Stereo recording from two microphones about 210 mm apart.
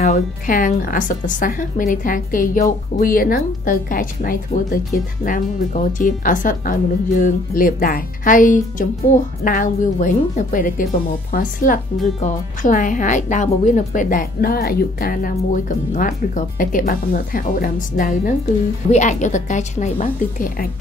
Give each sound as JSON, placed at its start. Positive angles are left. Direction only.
{"t": 0.0, "sound": "speech", "side_deg": 40}